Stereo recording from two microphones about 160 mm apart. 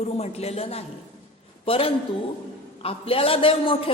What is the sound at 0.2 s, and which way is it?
A man's voice, 40° left (ahead or behind).